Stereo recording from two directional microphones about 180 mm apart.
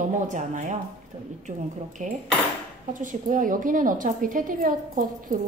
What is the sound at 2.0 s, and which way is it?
A woman's voice, 45° right (ahead or behind).